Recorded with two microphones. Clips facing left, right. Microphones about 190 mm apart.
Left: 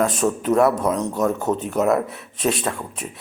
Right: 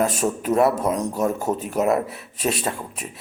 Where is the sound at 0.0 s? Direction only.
5° right (ahead or behind).